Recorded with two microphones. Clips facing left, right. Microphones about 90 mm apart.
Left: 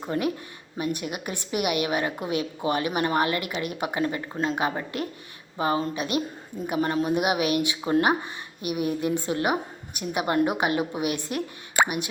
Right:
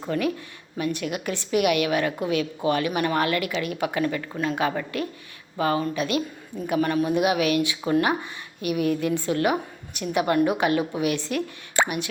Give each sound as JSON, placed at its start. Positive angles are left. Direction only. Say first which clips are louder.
{"t": 0.1, "sound": "a woman's voice", "louder": "right 2 dB", "side_deg": 20}
{"t": 8.6, "sound": "a woman's voice", "louder": "right 3 dB", "side_deg": 15}